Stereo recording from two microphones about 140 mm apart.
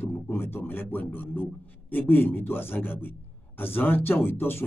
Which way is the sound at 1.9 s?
15° left (ahead or behind).